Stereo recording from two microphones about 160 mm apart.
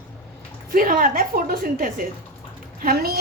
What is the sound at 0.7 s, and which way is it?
A woman's voice, 60° right (ahead or behind).